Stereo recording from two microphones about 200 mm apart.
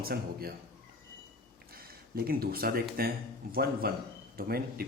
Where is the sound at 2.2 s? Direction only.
50° right (ahead or behind).